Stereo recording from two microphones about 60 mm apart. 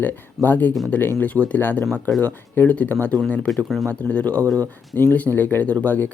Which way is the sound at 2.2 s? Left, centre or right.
Left.